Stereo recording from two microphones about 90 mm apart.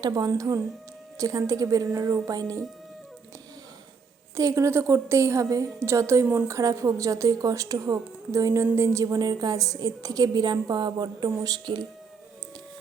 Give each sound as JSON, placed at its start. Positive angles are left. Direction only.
{"t": 0.0, "sound": "a woman's voice", "side_deg": -45}
{"t": 4.4, "sound": "a woman's voice", "side_deg": -35}
{"t": 9.2, "sound": "a woman's voice", "side_deg": -45}